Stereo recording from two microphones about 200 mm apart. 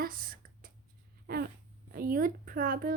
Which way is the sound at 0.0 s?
45° right (ahead or behind).